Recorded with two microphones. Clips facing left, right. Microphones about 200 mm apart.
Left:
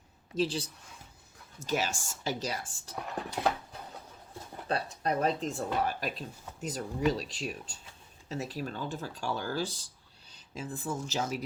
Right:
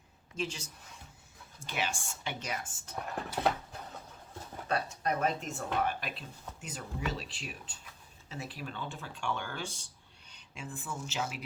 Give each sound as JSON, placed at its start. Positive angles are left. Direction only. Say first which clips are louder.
{"t": 0.3, "sound": "speech", "louder": "left 7 dB", "side_deg": 35}
{"t": 2.9, "sound": "dog", "louder": "left 1 dB", "side_deg": 0}
{"t": 4.7, "sound": "speech", "louder": "left 2 dB", "side_deg": 35}